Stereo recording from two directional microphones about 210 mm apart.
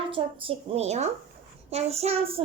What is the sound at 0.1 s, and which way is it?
A woman's voice, 25° right (ahead or behind).